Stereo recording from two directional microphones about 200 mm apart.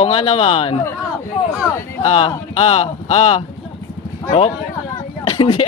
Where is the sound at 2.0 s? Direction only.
30° left (ahead or behind).